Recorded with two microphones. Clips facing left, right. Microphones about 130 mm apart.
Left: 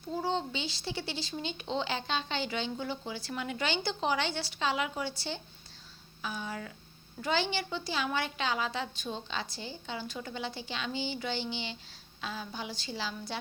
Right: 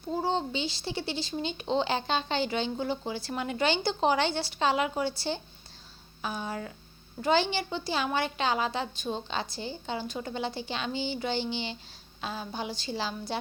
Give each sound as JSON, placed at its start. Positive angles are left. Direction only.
{"t": 0.1, "sound": "a woman's voice", "side_deg": -30}